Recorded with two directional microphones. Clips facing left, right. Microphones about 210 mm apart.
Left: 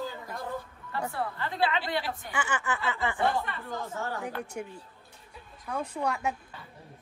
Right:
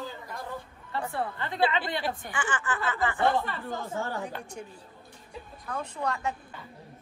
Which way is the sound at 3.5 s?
30° right (ahead or behind).